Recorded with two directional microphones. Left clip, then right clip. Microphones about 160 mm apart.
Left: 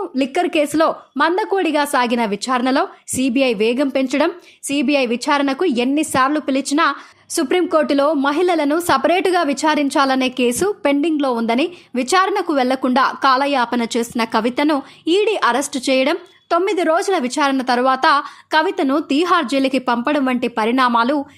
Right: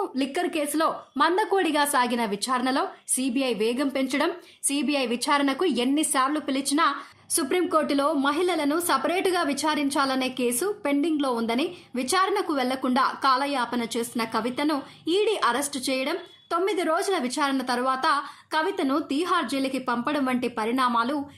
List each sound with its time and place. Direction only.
0.2 s a woman's voice: 45° left (ahead or behind)